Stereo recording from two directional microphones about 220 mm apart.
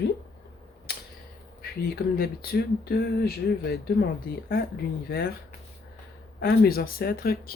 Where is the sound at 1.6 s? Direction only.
45° left (ahead or behind).